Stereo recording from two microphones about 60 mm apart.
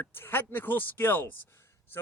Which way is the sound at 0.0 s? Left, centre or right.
Left.